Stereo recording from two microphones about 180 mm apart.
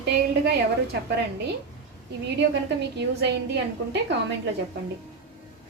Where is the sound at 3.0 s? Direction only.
70° right (ahead or behind).